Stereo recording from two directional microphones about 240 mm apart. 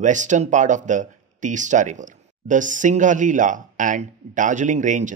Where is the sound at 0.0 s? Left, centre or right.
Right.